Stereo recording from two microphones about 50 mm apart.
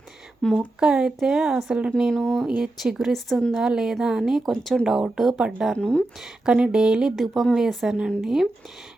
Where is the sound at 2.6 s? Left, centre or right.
Centre.